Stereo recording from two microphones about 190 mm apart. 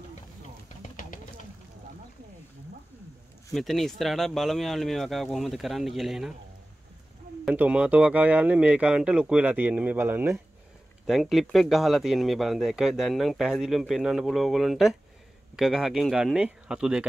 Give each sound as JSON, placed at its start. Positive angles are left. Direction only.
{"t": 0.8, "sound": "a sound", "side_deg": 45}
{"t": 3.5, "sound": "speech", "side_deg": 0}
{"t": 7.4, "sound": "speech", "side_deg": -5}